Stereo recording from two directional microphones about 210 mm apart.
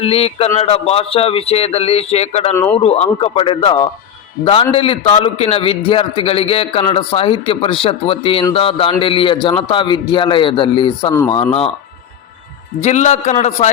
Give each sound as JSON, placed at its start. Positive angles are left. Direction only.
{"t": 0.0, "sound": "a man's voice", "side_deg": 30}
{"t": 12.8, "sound": "a man's voice", "side_deg": 35}